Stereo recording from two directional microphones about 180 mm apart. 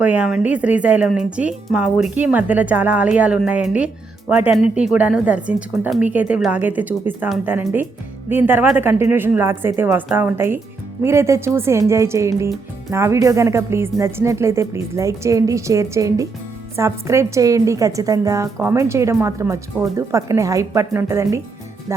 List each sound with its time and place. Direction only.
0.0 s a woman's voice: 5° right (ahead or behind)